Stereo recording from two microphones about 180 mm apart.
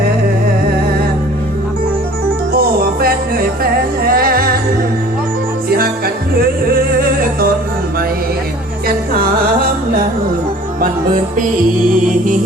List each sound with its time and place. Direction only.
2.5 s music: 55° right (ahead or behind)
5.6 s music: 55° right (ahead or behind)
10.8 s music: 50° right (ahead or behind)